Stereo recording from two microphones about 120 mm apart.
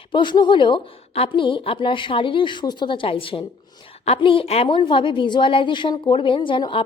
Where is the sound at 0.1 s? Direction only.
40° left (ahead or behind).